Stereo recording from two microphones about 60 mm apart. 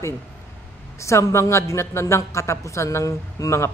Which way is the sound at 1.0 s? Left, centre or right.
Left.